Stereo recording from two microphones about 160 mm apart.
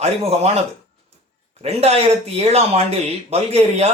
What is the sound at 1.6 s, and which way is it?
Speech, 40° right (ahead or behind).